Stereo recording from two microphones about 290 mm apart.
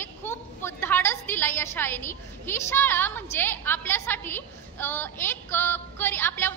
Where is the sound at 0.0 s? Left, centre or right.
Centre.